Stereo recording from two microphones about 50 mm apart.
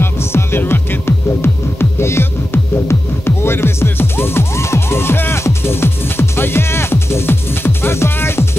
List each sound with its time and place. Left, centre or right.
0.0 s music: left